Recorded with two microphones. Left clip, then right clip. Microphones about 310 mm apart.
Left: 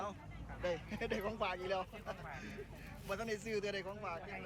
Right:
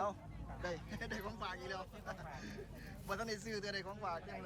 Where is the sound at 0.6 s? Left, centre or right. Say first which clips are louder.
Left 5 dB; centre.